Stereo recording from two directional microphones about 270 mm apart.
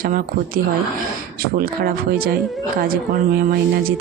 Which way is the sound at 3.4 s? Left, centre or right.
Right.